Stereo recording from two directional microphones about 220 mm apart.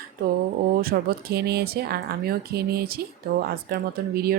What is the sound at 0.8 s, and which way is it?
Speech, 45° right (ahead or behind).